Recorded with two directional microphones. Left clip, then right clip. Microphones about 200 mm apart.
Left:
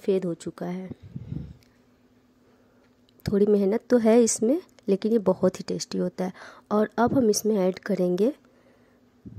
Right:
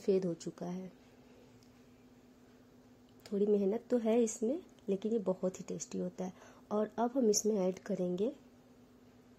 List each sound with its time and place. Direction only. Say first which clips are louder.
0.0 s a woman's voice: left 7 dB; 20° left (ahead or behind)
3.2 s a woman's voice: left 10 dB; 35° left (ahead or behind)